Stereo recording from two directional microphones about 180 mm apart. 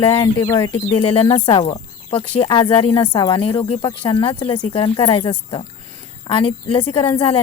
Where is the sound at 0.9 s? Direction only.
30° left (ahead or behind).